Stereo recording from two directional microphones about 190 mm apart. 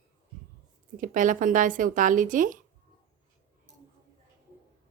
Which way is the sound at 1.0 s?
45° right (ahead or behind).